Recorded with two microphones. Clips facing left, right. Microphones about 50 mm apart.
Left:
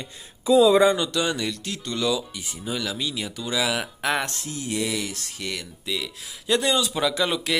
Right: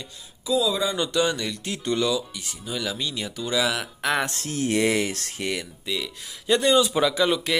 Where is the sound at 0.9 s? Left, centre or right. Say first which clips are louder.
Right 1 dB; centre.